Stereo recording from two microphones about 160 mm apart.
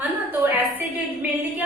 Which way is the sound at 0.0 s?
10° right (ahead or behind).